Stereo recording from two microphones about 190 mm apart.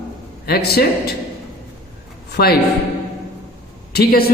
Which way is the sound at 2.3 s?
55° left (ahead or behind).